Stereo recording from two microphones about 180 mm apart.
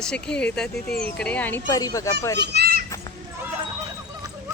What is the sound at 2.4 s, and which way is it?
Speech, 65° right (ahead or behind).